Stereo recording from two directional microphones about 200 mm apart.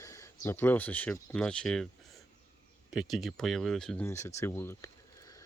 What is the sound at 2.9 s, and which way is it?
Speech, centre (ahead or behind).